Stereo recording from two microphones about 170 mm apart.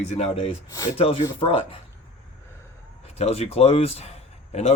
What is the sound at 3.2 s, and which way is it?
Speech, 35° left (ahead or behind).